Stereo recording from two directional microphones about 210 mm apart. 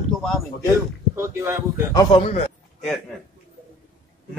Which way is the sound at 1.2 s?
10° right (ahead or behind).